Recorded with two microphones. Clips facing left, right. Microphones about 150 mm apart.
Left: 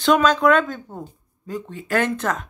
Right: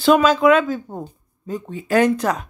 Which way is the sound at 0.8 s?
20° right (ahead or behind).